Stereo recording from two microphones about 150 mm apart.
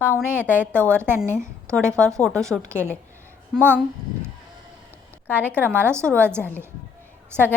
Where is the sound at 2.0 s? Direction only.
5° left (ahead or behind).